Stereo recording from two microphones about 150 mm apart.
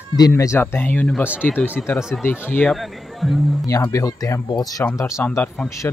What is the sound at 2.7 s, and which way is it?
Speech, centre (ahead or behind).